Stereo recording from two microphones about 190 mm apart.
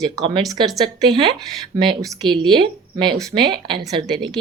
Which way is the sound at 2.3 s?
25° right (ahead or behind).